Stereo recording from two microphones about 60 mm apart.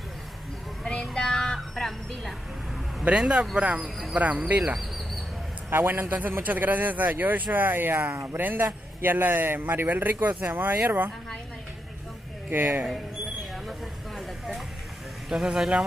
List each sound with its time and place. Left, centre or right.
1.1 s music: centre
3.1 s speech: centre
3.8 s a sound: centre
4.5 s speech: right
5.7 s a man's voice: right
12.4 s speech: right
13.7 s snake: centre
15.2 s speech: centre